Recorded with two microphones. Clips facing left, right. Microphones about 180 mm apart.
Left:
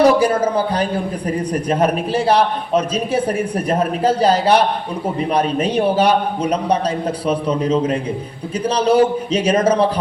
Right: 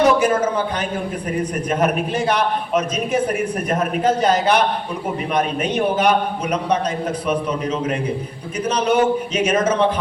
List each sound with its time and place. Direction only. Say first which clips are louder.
0.0 s a man's voice: left 2 dB; 35° left (ahead or behind)